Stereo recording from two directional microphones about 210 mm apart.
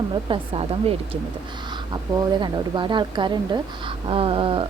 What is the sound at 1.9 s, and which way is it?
A woman's voice, 20° right (ahead or behind).